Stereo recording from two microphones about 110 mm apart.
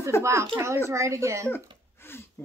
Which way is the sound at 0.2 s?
25° right (ahead or behind).